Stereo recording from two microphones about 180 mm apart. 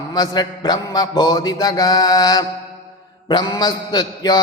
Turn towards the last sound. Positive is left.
turn(degrees=20)  # may be behind; listen again after turning